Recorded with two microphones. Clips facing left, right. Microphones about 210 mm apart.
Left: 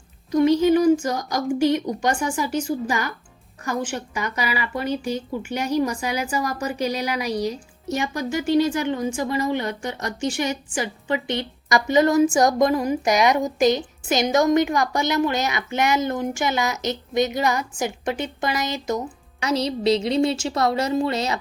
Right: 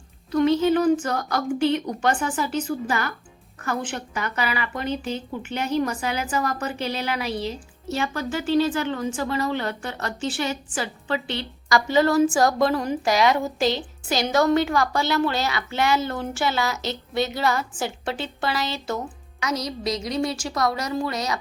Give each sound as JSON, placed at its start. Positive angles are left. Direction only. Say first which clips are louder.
{"t": 0.3, "sound": "a woman's voice", "louder": "left 2 dB", "side_deg": 15}
{"t": 19.4, "sound": "a woman's voice", "louder": "left 5 dB", "side_deg": 30}